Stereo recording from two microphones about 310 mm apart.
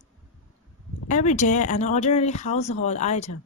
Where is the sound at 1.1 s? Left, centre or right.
Left.